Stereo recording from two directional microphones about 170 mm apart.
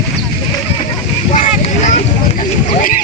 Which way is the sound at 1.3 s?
45° left (ahead or behind).